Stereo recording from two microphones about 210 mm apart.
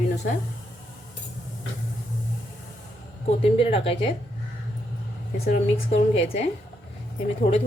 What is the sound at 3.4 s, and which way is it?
Speech, 25° left (ahead or behind).